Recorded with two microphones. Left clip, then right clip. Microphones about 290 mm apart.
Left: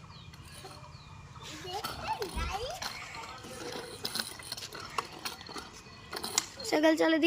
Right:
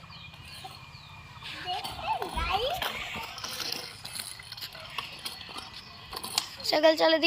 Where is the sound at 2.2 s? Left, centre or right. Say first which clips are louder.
Right 5 dB; centre.